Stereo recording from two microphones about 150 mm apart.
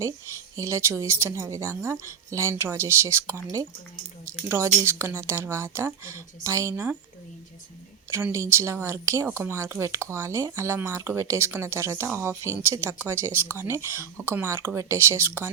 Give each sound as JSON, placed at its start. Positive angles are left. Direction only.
{"t": 0.5, "sound": "speech", "side_deg": -20}
{"t": 4.4, "sound": "speech", "side_deg": -15}
{"t": 8.1, "sound": "speech", "side_deg": -20}